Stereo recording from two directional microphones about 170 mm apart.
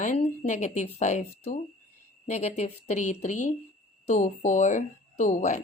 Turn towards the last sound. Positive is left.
turn(degrees=45)  # may be behind; listen again after turning